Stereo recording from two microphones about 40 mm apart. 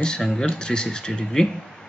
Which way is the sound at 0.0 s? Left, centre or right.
Centre.